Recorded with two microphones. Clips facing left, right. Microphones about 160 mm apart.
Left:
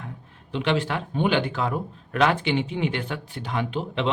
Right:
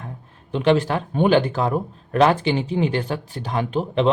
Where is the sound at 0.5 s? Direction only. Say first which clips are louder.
Right 6 dB; 40° right (ahead or behind).